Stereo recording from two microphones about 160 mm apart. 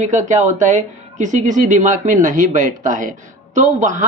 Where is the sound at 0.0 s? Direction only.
50° right (ahead or behind).